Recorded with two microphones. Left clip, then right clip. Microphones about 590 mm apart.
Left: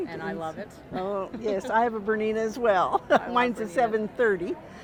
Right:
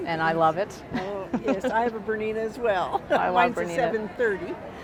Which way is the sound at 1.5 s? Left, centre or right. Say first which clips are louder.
Left 2 dB; left.